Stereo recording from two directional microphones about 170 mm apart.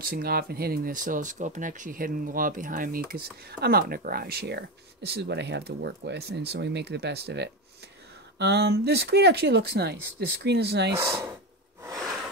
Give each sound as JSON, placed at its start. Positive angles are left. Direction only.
{"t": 0.0, "sound": "speech", "side_deg": -60}